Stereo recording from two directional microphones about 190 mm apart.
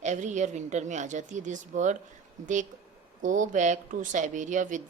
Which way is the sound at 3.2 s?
40° right (ahead or behind).